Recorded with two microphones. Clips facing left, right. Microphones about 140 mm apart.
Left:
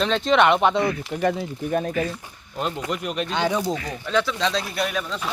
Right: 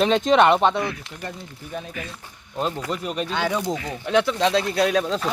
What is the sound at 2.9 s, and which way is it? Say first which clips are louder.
Speech: even; 35° right (ahead or behind).